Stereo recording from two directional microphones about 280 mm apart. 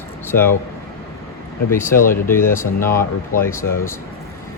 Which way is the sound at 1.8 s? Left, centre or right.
Left.